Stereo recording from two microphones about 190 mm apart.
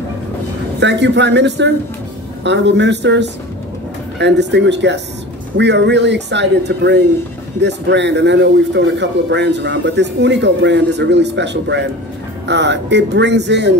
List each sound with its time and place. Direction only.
0.7 s a man's voice: 65° right (ahead or behind)